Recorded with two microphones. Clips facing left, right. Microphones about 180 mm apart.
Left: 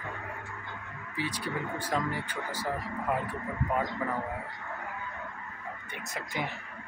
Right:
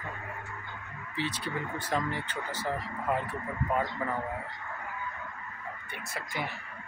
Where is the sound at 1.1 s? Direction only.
10° left (ahead or behind).